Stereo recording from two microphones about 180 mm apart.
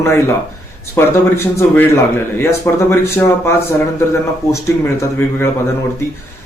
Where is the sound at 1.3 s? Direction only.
15° left (ahead or behind).